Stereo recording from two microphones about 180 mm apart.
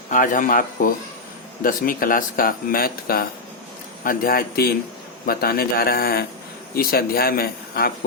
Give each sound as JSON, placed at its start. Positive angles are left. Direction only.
{"t": 0.1, "sound": "a man's voice", "side_deg": 45}